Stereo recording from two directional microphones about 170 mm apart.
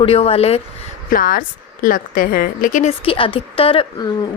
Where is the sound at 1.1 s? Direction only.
55° left (ahead or behind).